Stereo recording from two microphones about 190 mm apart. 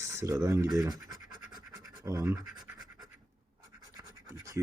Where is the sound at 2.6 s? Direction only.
Centre (ahead or behind).